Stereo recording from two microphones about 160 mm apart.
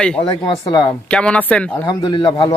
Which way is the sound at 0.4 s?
30° left (ahead or behind).